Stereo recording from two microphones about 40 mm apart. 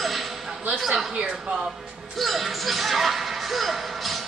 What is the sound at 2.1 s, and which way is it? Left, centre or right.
Speech, centre.